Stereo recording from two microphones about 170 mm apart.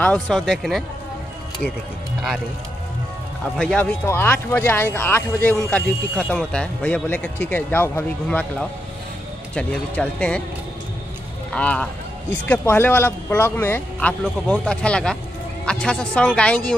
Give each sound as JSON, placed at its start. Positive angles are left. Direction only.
{"t": 0.0, "sound": "speech", "side_deg": 5}
{"t": 3.5, "sound": "speech", "side_deg": 5}
{"t": 11.5, "sound": "speech", "side_deg": 5}